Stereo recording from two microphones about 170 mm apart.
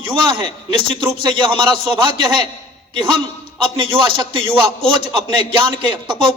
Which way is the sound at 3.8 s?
30° right (ahead or behind).